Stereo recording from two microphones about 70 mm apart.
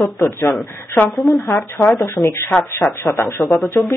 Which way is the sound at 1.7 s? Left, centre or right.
Left.